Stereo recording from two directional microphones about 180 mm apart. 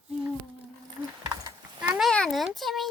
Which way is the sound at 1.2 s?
20° right (ahead or behind).